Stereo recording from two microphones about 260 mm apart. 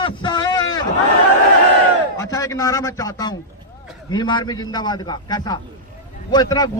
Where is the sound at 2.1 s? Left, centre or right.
Centre.